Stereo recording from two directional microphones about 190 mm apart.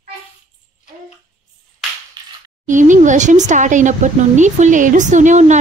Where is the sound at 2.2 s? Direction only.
20° right (ahead or behind).